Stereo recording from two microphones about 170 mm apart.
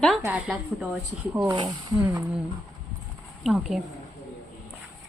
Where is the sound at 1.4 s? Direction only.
25° right (ahead or behind).